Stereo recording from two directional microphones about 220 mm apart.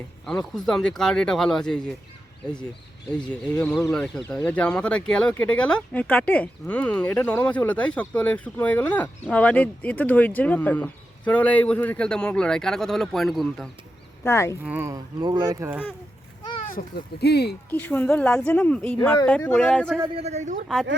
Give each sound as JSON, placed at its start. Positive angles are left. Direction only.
{"t": 0.3, "sound": "speech", "side_deg": 0}
{"t": 3.4, "sound": "speech", "side_deg": 5}
{"t": 14.3, "sound": "speech", "side_deg": 10}
{"t": 14.6, "sound": "speech", "side_deg": -10}
{"t": 16.6, "sound": "speech", "side_deg": 45}
{"t": 17.7, "sound": "speech", "side_deg": 10}
{"t": 20.0, "sound": "a man's voice", "side_deg": -25}